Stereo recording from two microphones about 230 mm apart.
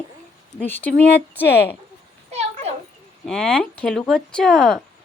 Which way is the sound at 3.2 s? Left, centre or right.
Centre.